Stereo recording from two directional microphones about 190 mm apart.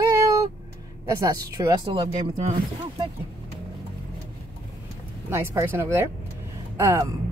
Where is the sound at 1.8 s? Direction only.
35° right (ahead or behind).